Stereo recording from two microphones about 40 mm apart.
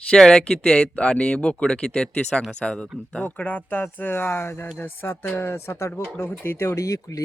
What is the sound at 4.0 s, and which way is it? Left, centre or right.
Speech, left.